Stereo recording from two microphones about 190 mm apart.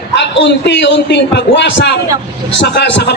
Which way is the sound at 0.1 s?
65° left (ahead or behind).